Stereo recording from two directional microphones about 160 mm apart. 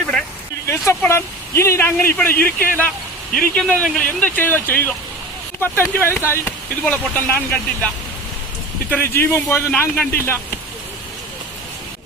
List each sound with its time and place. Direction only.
0.7 s speech: 15° left (ahead or behind)
8.9 s speech: 15° left (ahead or behind)